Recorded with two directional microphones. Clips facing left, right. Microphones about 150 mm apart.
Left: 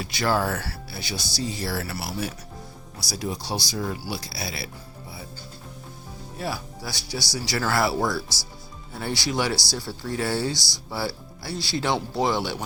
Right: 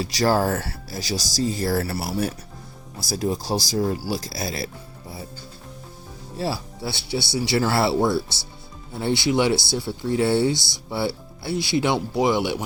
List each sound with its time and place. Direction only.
0.0 s speech: 40° right (ahead or behind)
0.6 s speech: 30° right (ahead or behind)
0.9 s speech: 40° right (ahead or behind)
6.3 s speech: 30° right (ahead or behind)